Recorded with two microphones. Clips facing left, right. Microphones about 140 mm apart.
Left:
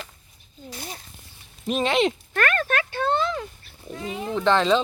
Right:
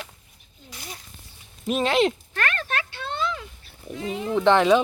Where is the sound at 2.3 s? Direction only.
50° left (ahead or behind).